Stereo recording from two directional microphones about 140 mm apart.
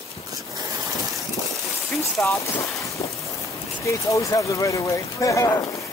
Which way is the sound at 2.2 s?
20° left (ahead or behind).